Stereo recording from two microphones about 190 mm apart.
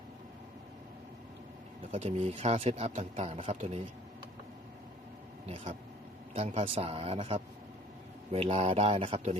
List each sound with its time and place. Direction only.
1.9 s speech: 35° right (ahead or behind)
6.3 s speech: 35° right (ahead or behind)